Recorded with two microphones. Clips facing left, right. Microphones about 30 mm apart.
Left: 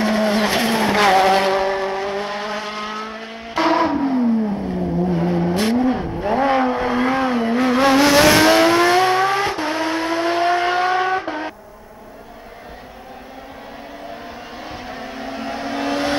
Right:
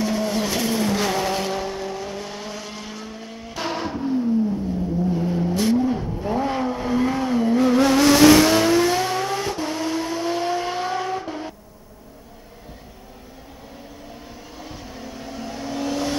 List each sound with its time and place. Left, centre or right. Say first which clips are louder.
0.0 s vehicle: left 5 dB; left
14.6 s vehicle: left 5 dB; left